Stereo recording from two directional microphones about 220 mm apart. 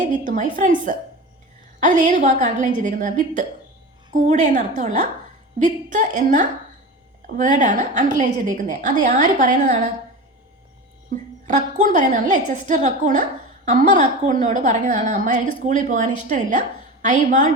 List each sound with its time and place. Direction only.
0.0 s a woman's voice: 35° right (ahead or behind)
4.5 s a woman's voice: 35° right (ahead or behind)
11.4 s a woman's voice: 35° right (ahead or behind)